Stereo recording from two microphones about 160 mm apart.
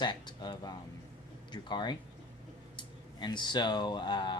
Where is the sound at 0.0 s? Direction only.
30° left (ahead or behind).